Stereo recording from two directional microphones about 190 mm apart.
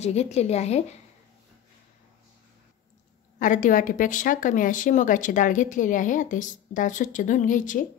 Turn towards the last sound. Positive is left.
turn(degrees=45)  # may be behind; listen again after turning